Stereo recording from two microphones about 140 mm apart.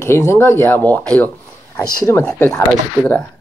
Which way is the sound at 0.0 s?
20° left (ahead or behind).